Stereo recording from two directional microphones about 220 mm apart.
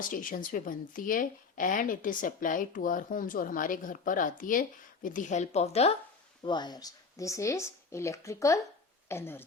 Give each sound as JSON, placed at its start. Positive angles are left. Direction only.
{"t": 0.0, "sound": "a woman's voice", "side_deg": 40}